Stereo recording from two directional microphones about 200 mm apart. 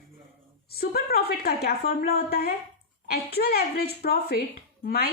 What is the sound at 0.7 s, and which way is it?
A woman's voice, 50° left (ahead or behind).